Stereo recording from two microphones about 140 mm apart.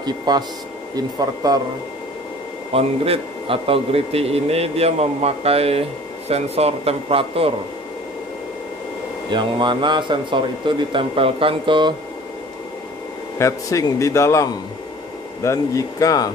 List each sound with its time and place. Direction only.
0.0 s speech: 30° right (ahead or behind)
2.7 s a man's voice: 45° right (ahead or behind)
9.3 s speech: 35° right (ahead or behind)
13.4 s speech: 25° left (ahead or behind)